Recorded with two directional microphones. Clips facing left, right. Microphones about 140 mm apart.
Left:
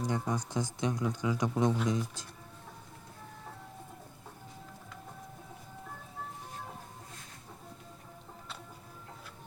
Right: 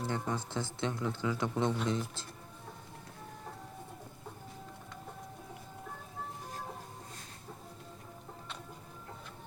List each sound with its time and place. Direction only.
0.0 s speech: 15° left (ahead or behind)